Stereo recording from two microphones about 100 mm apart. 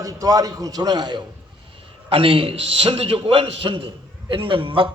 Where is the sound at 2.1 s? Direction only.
65° right (ahead or behind).